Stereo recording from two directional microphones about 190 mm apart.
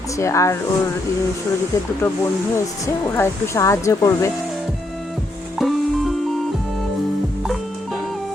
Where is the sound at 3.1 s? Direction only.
15° left (ahead or behind).